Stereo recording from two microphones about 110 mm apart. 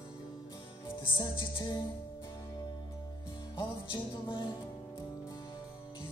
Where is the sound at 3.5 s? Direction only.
45° left (ahead or behind).